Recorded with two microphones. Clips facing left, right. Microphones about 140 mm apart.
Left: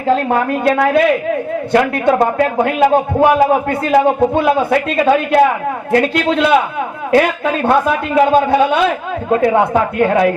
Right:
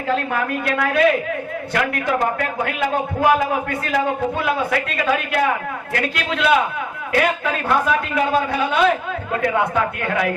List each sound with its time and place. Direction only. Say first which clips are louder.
0.3 s a man's voice: left 8 dB; 30° left (ahead or behind)